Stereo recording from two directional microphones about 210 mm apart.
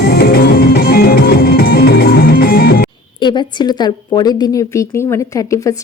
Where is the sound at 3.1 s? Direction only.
20° left (ahead or behind).